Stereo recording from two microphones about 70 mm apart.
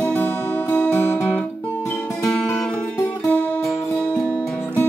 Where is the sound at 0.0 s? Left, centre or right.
Left.